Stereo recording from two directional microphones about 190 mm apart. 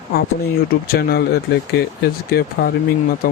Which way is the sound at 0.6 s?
50° left (ahead or behind).